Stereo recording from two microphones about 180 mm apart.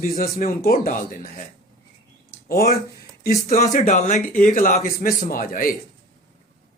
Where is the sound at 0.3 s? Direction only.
55° left (ahead or behind).